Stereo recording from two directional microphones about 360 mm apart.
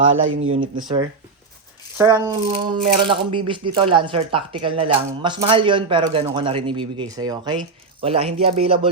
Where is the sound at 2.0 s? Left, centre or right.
Centre.